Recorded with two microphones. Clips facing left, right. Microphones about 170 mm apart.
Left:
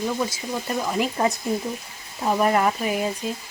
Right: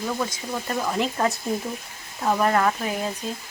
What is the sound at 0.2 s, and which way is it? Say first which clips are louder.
Speech: left 1 dB; 10° left (ahead or behind).